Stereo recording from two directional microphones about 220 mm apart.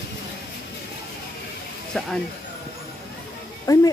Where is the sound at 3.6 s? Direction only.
15° left (ahead or behind).